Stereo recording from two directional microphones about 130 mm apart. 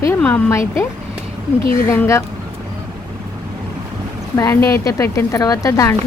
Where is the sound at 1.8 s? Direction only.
20° left (ahead or behind).